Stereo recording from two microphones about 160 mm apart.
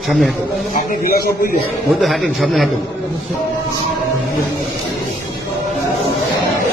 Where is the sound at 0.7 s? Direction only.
65° left (ahead or behind).